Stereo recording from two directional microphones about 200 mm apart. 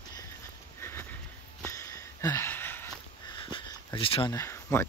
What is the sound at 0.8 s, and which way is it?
Sniff, 10° left (ahead or behind).